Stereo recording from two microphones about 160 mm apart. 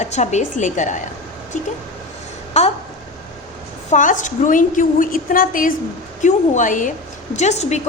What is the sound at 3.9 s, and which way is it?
A woman's voice, 50° left (ahead or behind).